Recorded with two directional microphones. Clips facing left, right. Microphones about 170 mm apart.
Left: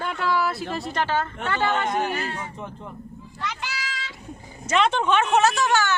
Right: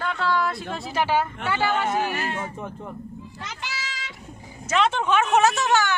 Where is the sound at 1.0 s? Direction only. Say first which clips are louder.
Right 3 dB; 10° right (ahead or behind).